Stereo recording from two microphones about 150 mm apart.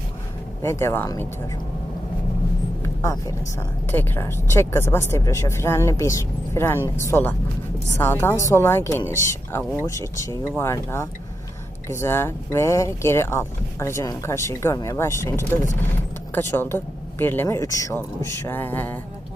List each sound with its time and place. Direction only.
0.6 s speech: 15° left (ahead or behind)
2.8 s vehicle: 20° left (ahead or behind)
3.8 s speech: 15° left (ahead or behind)